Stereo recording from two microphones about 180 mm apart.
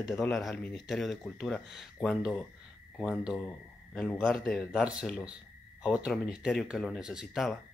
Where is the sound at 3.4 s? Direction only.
5° left (ahead or behind).